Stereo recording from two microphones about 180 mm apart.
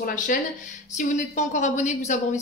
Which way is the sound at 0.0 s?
45° left (ahead or behind).